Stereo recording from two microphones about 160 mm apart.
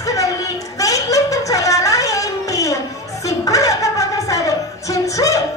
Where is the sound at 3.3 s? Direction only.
20° left (ahead or behind).